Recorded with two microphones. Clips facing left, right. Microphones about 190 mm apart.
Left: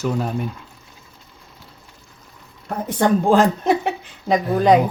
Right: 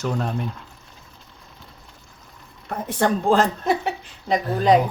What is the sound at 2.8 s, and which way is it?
Speech, 45° left (ahead or behind).